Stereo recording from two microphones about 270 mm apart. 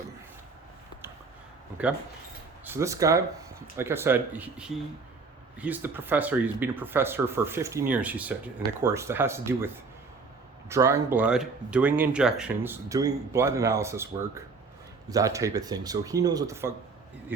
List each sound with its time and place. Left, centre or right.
1.8 s speech: centre
10.7 s speech: centre